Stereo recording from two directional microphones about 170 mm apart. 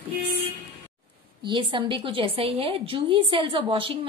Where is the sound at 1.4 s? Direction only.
30° right (ahead or behind).